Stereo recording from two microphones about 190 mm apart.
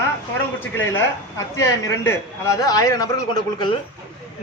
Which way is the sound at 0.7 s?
15° left (ahead or behind).